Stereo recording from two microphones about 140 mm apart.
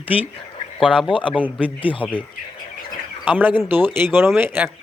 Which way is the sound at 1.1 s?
40° left (ahead or behind).